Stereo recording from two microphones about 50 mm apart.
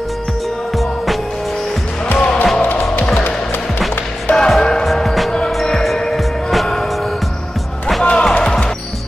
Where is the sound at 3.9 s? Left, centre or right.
Left.